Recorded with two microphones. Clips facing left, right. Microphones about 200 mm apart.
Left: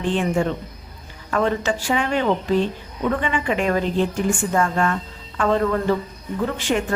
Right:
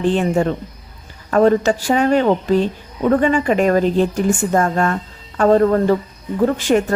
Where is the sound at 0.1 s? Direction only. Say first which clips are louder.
Even; 40° right (ahead or behind).